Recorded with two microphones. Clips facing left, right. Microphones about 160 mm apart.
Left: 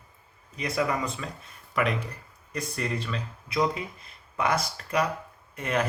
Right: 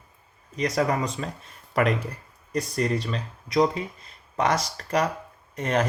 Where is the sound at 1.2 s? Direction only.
40° right (ahead or behind).